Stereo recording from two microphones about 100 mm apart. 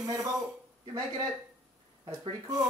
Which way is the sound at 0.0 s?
35° right (ahead or behind).